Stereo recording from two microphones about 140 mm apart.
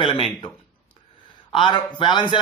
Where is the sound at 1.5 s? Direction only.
35° left (ahead or behind).